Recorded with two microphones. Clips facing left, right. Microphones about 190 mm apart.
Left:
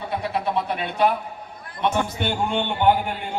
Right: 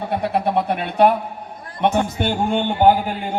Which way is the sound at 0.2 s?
55° right (ahead or behind).